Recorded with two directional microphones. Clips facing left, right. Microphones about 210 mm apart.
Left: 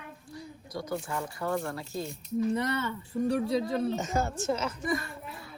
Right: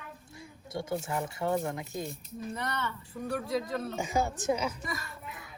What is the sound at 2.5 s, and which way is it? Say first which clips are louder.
Speech: left 6 dB; 30° left (ahead or behind).